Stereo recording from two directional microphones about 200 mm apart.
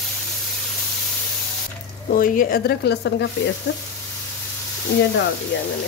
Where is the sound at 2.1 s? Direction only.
45° left (ahead or behind).